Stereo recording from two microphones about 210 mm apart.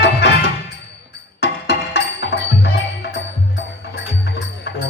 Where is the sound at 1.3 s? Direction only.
50° left (ahead or behind).